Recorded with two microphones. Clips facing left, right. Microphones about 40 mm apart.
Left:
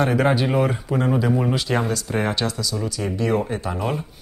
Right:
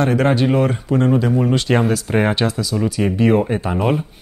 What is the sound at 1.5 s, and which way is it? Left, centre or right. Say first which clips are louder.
Speech: right 5 dB; centre.